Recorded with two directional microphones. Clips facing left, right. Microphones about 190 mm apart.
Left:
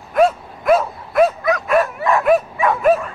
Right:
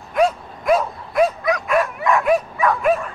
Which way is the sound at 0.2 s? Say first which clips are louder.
Left 3 dB; centre (ahead or behind).